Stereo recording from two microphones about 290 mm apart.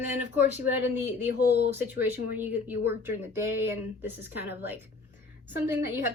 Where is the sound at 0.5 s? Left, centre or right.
Centre.